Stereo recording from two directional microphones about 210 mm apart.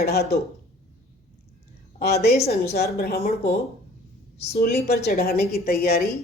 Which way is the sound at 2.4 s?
30° left (ahead or behind).